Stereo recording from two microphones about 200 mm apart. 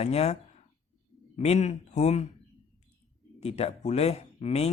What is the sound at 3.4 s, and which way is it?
Speech, 30° left (ahead or behind).